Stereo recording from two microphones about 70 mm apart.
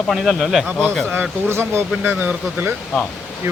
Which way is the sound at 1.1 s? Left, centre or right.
Right.